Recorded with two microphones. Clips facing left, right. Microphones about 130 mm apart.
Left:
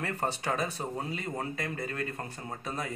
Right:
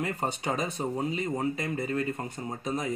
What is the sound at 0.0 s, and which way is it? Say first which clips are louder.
Speech: right 2 dB; 15° right (ahead or behind).